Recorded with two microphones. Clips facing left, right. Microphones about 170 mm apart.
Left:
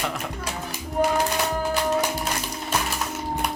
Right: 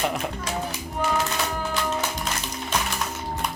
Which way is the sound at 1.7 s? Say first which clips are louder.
Left 4 dB; 15° left (ahead or behind).